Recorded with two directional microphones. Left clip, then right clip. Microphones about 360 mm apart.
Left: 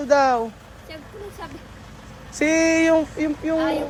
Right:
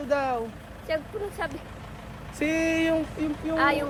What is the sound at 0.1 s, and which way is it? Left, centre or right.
Speech, centre.